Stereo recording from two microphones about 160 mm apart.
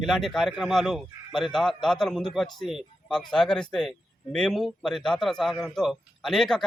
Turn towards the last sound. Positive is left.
turn(degrees=0)  # may be behind; listen again after turning